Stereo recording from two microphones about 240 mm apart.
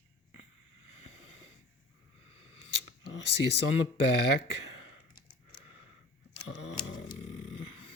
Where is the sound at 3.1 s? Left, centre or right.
Left.